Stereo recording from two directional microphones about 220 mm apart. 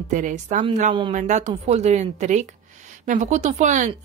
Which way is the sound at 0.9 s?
20° right (ahead or behind).